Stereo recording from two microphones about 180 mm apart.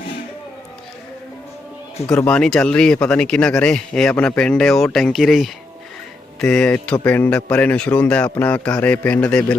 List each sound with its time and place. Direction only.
2.0 s speech: 5° left (ahead or behind)